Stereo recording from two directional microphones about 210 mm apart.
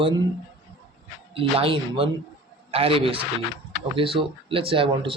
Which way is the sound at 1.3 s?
25° right (ahead or behind).